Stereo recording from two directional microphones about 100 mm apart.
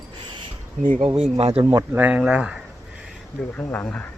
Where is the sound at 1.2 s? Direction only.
80° right.